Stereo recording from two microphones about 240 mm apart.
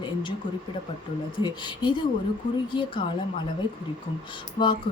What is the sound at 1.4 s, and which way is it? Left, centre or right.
Speech, centre.